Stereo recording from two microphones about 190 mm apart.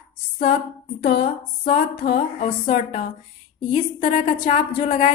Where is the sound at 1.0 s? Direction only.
55° left (ahead or behind).